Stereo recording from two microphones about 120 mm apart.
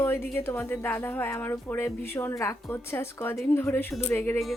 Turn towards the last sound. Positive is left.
turn(degrees=20)  # may be behind; listen again after turning